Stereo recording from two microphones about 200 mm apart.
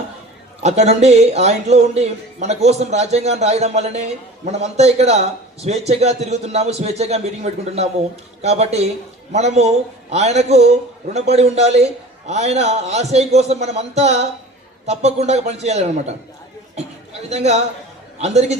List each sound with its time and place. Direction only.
0.6 s a man's voice: 35° right (ahead or behind)
16.7 s a sound: 35° right (ahead or behind)
18.2 s a man's voice: 35° right (ahead or behind)